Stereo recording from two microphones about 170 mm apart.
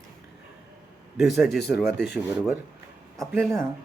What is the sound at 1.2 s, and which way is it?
Speech, centre (ahead or behind).